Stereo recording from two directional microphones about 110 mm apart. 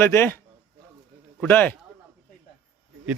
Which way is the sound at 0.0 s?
20° left (ahead or behind).